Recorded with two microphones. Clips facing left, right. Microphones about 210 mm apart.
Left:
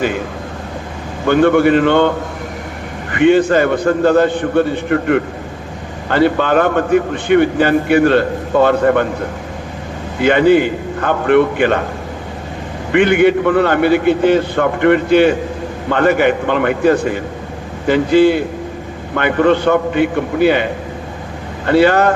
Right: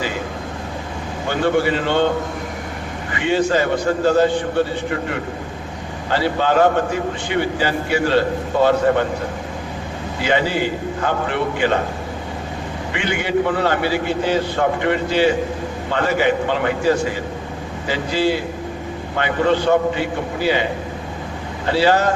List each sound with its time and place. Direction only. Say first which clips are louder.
1.3 s a man's voice: left 8 dB; 55° left (ahead or behind)
3.1 s a man's voice: left 8 dB; 55° left (ahead or behind)
10.2 s a man's voice: left 9 dB; 55° left (ahead or behind)
12.9 s a man's voice: left 11 dB; 55° left (ahead or behind)
21.7 s a man's voice: left 5 dB; 55° left (ahead or behind)